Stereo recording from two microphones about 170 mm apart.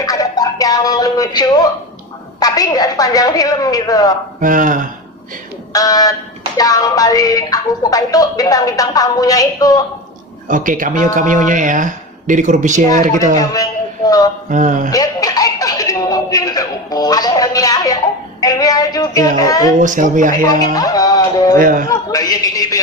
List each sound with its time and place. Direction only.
0.0 s a man's voice: 20° left (ahead or behind)
4.4 s speech: 50° right (ahead or behind)
5.7 s a man's voice: 20° left (ahead or behind)
10.5 s speech: 50° right (ahead or behind)
13.5 s music: 20° left (ahead or behind)
14.5 s speech: 50° right (ahead or behind)
14.8 s a man's voice: 20° left (ahead or behind)
19.8 s speech: 50° right (ahead or behind)
20.7 s a man's voice: 20° left (ahead or behind)
21.6 s speech: 55° right (ahead or behind)
21.8 s a man's voice: 20° left (ahead or behind)